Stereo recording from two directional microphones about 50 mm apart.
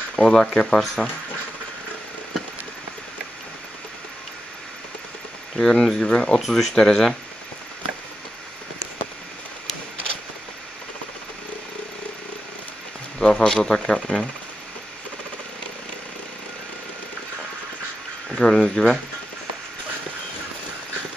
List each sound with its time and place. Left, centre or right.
0.1 s speech: centre
5.6 s speech: centre
13.2 s speech: centre
18.4 s speech: centre